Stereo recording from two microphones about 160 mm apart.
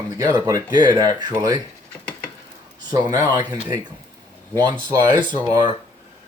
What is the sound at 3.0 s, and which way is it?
Speech, 20° right (ahead or behind).